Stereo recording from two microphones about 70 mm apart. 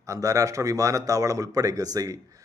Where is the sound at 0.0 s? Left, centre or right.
Right.